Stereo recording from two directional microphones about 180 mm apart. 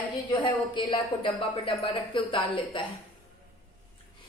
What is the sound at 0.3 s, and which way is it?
A woman's voice, 25° left (ahead or behind).